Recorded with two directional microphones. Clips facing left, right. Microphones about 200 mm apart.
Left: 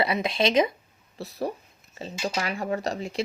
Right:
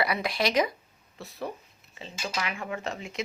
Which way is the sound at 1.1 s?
35° left (ahead or behind).